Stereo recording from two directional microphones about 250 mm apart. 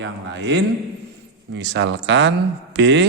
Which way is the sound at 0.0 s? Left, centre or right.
Right.